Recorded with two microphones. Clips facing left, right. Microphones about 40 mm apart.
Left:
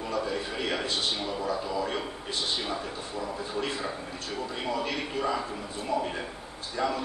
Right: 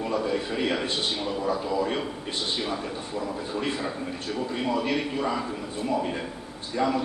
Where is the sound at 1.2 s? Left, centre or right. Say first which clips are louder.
Right 3 dB; centre.